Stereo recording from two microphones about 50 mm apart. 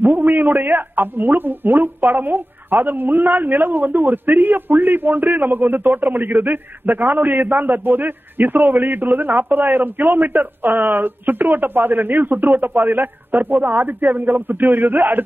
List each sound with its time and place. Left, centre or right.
0.0 s a man's voice: right